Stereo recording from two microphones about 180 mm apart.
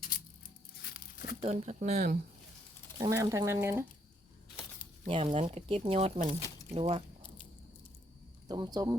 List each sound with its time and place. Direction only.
0.8 s a sound: 60° left (ahead or behind)
1.4 s speech: 40° right (ahead or behind)
3.0 s speech: 15° right (ahead or behind)
5.0 s speech: 30° right (ahead or behind)
8.4 s speech: 20° right (ahead or behind)